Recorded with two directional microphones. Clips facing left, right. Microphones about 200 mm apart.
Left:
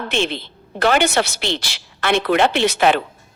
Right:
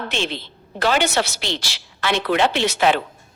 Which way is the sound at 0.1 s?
55° left (ahead or behind).